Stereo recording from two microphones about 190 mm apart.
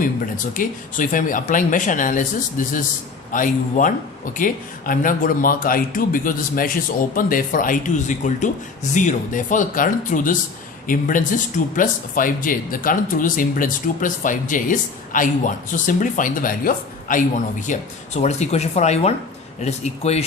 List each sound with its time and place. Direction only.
0.0 s speech: 45° left (ahead or behind)